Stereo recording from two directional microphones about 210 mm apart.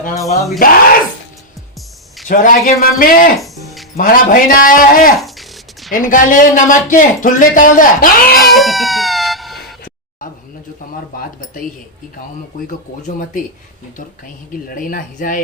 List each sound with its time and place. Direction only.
0.6 s speech: 45° left (ahead or behind)
2.2 s speech: 40° left (ahead or behind)
3.3 s music: centre (ahead or behind)
3.9 s speech: 40° left (ahead or behind)
5.2 s music: centre (ahead or behind)
5.9 s speech: 40° left (ahead or behind)
8.4 s cat: centre (ahead or behind)
11.1 s speech: 40° left (ahead or behind)
12.5 s speech: 40° left (ahead or behind)
14.7 s speech: 40° left (ahead or behind)